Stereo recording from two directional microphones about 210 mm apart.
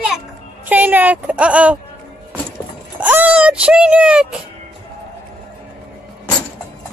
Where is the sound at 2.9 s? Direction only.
10° right (ahead or behind).